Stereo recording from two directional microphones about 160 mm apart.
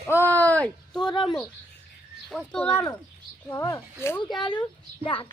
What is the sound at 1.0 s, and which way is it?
Speech, 30° left (ahead or behind).